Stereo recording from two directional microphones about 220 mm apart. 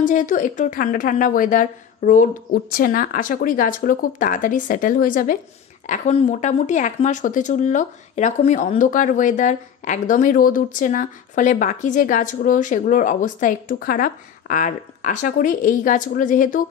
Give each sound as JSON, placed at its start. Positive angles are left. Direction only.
{"t": 0.0, "sound": "speech", "side_deg": 35}